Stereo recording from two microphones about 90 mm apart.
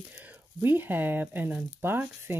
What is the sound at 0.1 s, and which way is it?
Speech, 20° right (ahead or behind).